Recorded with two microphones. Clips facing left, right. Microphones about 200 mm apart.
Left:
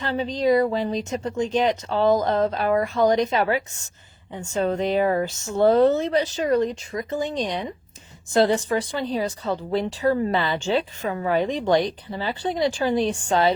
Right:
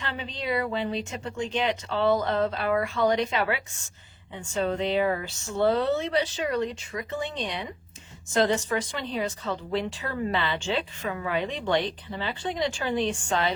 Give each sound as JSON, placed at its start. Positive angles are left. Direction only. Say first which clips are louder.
{"t": 0.0, "sound": "speech", "louder": "left 11 dB", "side_deg": 40}